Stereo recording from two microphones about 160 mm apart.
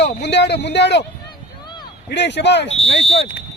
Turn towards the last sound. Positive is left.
turn(degrees=40)  # may be behind; listen again after turning